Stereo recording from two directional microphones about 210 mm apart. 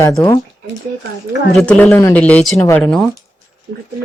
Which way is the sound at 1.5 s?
5° left (ahead or behind).